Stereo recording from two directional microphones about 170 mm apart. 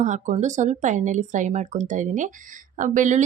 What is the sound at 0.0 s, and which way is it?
A woman's voice, 45° right (ahead or behind).